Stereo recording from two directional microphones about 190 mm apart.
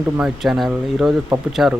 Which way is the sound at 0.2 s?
Centre (ahead or behind).